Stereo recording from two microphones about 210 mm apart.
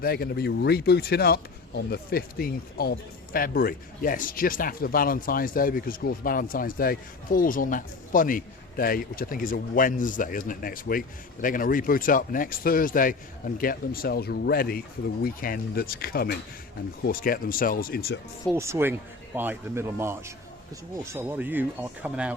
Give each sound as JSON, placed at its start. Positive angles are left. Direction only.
{"t": 0.0, "sound": "a man's voice", "side_deg": 45}
{"t": 18.5, "sound": "speech", "side_deg": -15}